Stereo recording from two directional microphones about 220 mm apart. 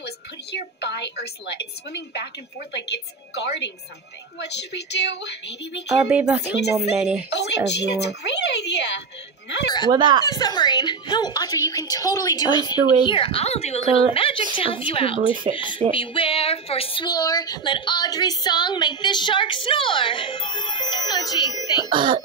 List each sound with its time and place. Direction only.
0.0 s a woman's voice: 50° left (ahead or behind)
6.0 s speech: 5° right (ahead or behind)
6.4 s speech: 50° left (ahead or behind)
7.0 s speech: 5° right (ahead or behind)
7.2 s speech: 50° left (ahead or behind)
9.8 s speech: 20° right (ahead or behind)
10.2 s a woman's voice: 20° left (ahead or behind)
21.8 s speech: 20° right (ahead or behind)